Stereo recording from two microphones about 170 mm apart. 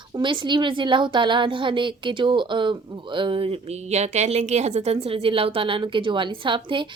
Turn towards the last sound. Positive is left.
turn(degrees=-30)  # may be behind; listen again after turning